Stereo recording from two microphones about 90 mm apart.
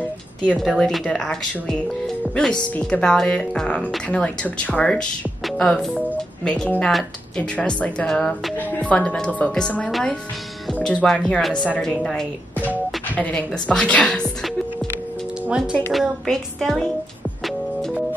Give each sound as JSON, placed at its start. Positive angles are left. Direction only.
{"t": 0.6, "sound": "speech", "side_deg": 5}
{"t": 6.1, "sound": "music", "side_deg": 5}
{"t": 6.9, "sound": "speech", "side_deg": 0}
{"t": 7.5, "sound": "speech", "side_deg": 15}
{"t": 8.5, "sound": "music", "side_deg": 20}
{"t": 8.9, "sound": "speech", "side_deg": 10}
{"t": 9.8, "sound": "a woman's voice", "side_deg": 0}
{"t": 13.1, "sound": "a woman's voice", "side_deg": 15}
{"t": 15.4, "sound": "speech", "side_deg": -10}
{"t": 15.9, "sound": "speech", "side_deg": 0}